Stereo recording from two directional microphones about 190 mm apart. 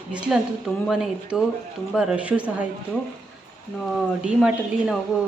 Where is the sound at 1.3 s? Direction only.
5° right (ahead or behind).